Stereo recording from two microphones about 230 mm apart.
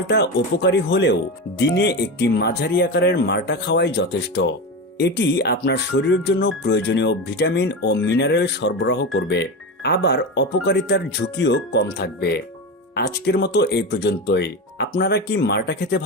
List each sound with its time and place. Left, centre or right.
0.1 s speech: left